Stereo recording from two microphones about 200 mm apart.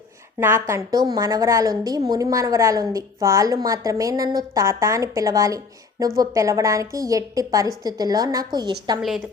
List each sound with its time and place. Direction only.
0.3 s a woman's voice: 10° right (ahead or behind)
9.0 s a woman's voice: centre (ahead or behind)